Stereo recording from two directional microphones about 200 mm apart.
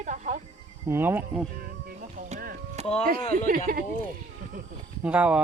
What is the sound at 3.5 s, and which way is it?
Speech, 45° right (ahead or behind).